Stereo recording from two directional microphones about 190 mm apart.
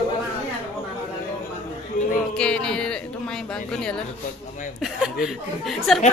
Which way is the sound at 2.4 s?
5° left (ahead or behind).